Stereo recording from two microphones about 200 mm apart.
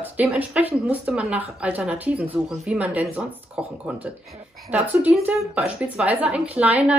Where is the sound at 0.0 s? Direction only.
10° right (ahead or behind).